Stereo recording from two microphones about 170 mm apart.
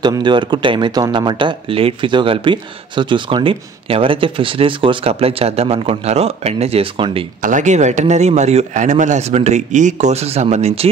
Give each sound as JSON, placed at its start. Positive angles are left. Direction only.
{"t": 0.0, "sound": "speech", "side_deg": -25}
{"t": 7.4, "sound": "a man's voice", "side_deg": -45}